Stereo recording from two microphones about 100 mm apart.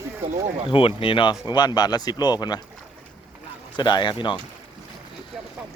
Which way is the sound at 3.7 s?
50° left (ahead or behind).